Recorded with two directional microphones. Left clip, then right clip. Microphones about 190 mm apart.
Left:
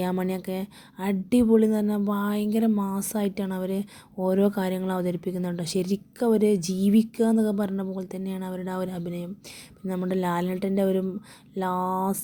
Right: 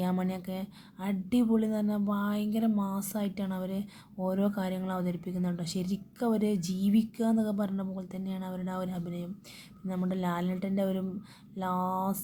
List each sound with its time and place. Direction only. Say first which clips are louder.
0.0 s speech: left 6 dB; 30° left (ahead or behind)